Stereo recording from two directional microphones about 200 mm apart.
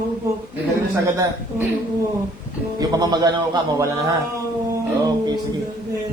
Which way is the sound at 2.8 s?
20° right (ahead or behind).